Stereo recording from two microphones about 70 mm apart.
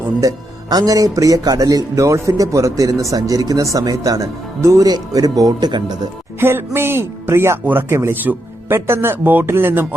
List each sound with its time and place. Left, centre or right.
0.2 s speech: right
6.4 s speech: right
8.1 s speech: right